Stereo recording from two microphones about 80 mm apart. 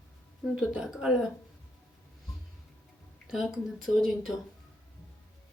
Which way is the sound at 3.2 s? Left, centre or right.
Centre.